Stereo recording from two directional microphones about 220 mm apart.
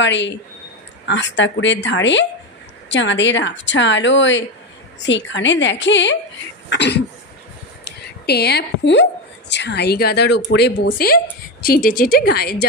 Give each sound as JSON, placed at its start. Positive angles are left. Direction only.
{"t": 0.0, "sound": "speech", "side_deg": 55}
{"t": 6.7, "sound": "cough", "side_deg": 50}
{"t": 8.0, "sound": "a woman's voice", "side_deg": 45}